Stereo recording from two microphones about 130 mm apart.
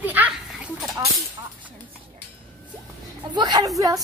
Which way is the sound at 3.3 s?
30° right (ahead or behind).